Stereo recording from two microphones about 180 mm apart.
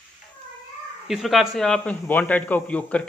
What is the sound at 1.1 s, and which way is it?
A man's voice, centre (ahead or behind).